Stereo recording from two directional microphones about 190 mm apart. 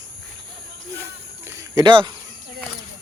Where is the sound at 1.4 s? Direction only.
15° right (ahead or behind).